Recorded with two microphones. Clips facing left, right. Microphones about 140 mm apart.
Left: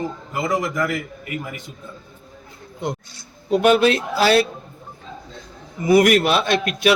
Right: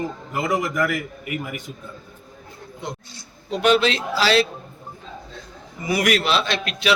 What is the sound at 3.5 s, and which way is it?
Speech, 50° left (ahead or behind).